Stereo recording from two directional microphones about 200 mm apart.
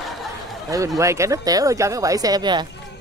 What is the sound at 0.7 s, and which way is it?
Speech, 15° right (ahead or behind).